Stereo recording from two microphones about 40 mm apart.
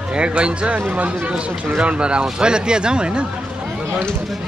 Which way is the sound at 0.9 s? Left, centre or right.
Right.